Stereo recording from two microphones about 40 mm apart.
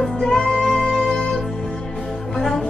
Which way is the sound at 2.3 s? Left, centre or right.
Centre.